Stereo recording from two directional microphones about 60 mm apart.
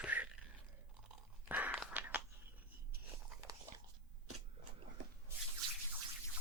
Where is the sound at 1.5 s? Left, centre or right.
Right.